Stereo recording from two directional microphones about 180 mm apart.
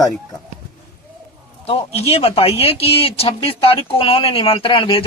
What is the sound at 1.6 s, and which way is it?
Speech, 35° left (ahead or behind).